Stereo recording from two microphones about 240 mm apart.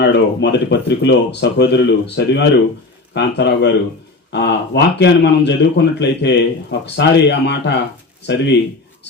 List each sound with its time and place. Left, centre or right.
0.0 s speech: left